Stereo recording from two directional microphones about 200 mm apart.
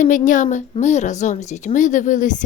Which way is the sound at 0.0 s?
40° left (ahead or behind).